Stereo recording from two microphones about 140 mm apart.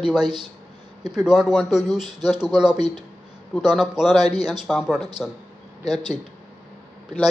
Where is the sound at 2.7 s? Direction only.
30° right (ahead or behind).